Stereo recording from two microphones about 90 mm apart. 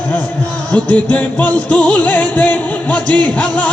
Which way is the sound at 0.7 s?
15° left (ahead or behind).